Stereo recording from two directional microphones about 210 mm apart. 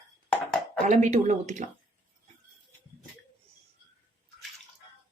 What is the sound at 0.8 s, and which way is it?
Speech, 30° right (ahead or behind).